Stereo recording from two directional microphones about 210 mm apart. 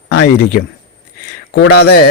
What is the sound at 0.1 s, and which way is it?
A man's voice, 50° left (ahead or behind).